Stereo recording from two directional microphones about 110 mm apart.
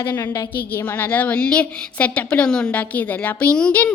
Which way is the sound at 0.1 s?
30° left (ahead or behind).